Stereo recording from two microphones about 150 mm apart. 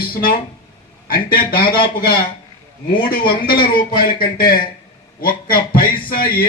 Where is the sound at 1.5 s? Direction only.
35° left (ahead or behind).